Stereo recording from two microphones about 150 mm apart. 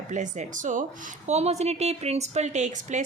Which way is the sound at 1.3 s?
45° right (ahead or behind).